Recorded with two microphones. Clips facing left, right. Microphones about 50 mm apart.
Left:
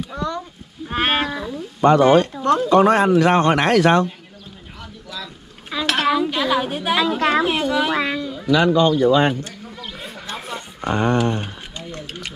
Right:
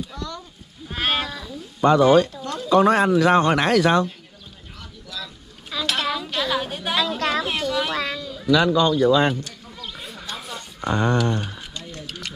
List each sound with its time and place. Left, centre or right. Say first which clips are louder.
0.1 s a sound: left 7 dB; left
0.8 s livestock: left 4 dB; left
1.8 s speech: left 2 dB; left
2.0 s speech: left 3 dB; left
2.8 s a man's voice: right 1 dB; left
3.1 s a man's voice: left 2 dB; left
5.2 s a sound: left 2 dB; left
6.0 s a woman's voice: left 6 dB; centre
8.5 s speech: left 2 dB; left
9.4 s a sound: left 3 dB; left
10.9 s speech: left 2 dB; left
11.8 s a sound: left 5 dB; left